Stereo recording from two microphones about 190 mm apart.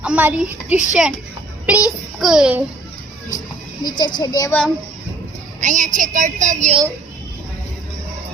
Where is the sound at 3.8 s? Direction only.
20° left (ahead or behind).